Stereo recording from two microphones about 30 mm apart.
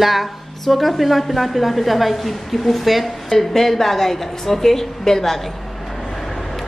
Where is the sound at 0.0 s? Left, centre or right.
Centre.